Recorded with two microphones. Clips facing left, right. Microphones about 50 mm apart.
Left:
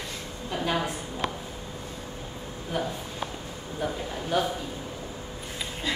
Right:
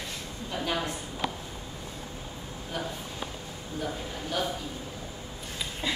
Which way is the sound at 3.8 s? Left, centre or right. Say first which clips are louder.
Left 3 dB; centre.